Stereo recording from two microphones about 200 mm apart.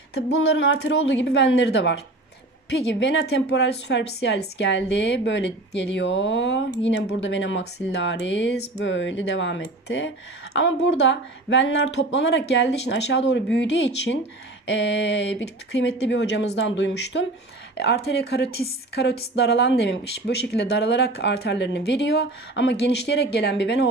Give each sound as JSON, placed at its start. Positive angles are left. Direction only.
{"t": 0.1, "sound": "a woman's voice", "side_deg": 65}